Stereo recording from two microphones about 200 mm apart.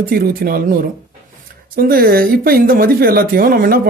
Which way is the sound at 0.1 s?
45° right (ahead or behind).